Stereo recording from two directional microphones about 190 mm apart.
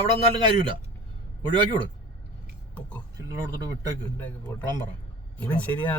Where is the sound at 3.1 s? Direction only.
20° right (ahead or behind).